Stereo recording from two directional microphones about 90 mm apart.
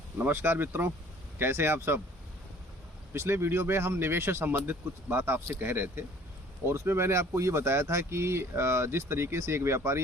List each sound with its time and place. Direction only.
0.2 s speech: 20° right (ahead or behind)
3.1 s speech: 25° right (ahead or behind)